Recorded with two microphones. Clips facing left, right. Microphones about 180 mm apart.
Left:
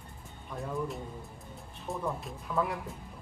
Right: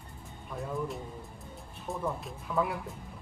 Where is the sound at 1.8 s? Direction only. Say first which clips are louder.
Even; centre (ahead or behind).